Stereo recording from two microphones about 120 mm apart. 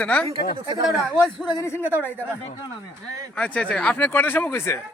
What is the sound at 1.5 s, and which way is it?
Speech, 25° left (ahead or behind).